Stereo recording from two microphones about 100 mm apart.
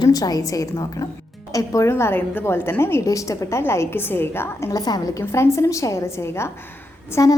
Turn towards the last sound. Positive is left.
turn(degrees=35)  # may be behind; listen again after turning